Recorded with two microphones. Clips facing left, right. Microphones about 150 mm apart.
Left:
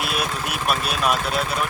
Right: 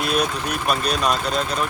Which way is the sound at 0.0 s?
5° left (ahead or behind).